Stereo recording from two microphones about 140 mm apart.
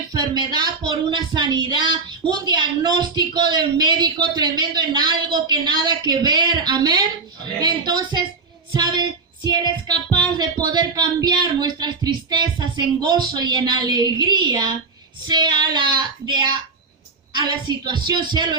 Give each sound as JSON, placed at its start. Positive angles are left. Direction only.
{"t": 0.1, "sound": "speech", "side_deg": -30}